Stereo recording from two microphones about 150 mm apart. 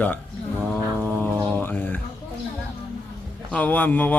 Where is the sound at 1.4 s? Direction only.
15° left (ahead or behind).